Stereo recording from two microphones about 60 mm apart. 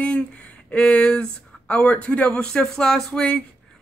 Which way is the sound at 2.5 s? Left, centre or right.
Centre.